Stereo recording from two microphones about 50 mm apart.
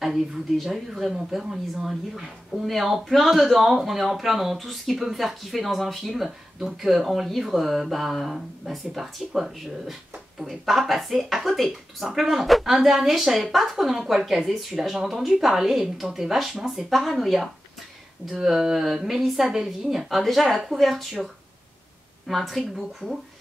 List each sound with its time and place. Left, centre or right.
0.0 s speech: centre
18.4 s a sound: centre
19.0 s speech: centre
22.3 s speech: centre